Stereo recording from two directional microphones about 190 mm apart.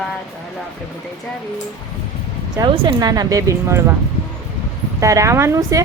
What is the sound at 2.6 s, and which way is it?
Speech, 20° right (ahead or behind).